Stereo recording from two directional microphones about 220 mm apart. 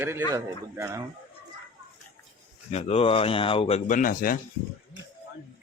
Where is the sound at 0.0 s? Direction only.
10° right (ahead or behind).